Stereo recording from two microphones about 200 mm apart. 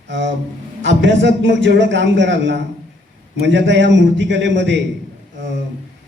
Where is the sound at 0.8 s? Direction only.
60° right (ahead or behind).